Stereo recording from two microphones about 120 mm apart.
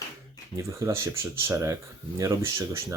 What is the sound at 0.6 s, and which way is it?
Speech, 25° right (ahead or behind).